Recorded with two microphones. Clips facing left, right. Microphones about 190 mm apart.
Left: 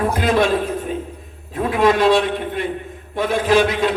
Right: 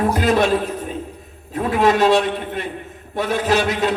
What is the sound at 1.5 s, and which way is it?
A woman's voice, 45° right (ahead or behind).